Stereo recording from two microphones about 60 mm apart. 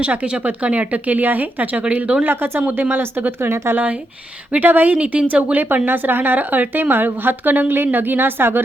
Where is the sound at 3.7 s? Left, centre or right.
Right.